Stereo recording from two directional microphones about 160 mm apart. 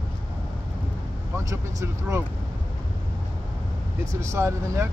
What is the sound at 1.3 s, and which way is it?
Speech, 20° right (ahead or behind).